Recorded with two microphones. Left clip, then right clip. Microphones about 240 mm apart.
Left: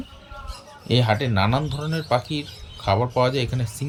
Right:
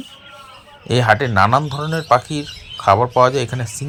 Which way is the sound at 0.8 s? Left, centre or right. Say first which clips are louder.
Right 4 dB; centre.